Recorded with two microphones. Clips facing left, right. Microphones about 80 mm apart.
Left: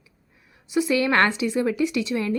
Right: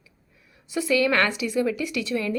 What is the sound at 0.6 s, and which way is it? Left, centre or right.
Speech, left.